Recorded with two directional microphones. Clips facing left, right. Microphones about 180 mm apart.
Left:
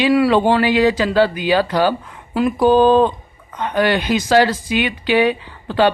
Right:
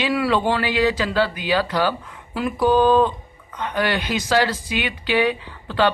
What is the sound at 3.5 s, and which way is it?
Speech, 45° left (ahead or behind).